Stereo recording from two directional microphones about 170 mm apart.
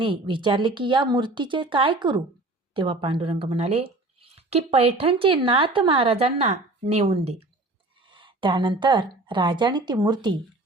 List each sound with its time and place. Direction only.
0.0 s a woman's voice: 30° right (ahead or behind)